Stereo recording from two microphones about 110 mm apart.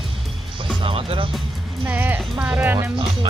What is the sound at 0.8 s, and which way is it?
Speech, 55° right (ahead or behind).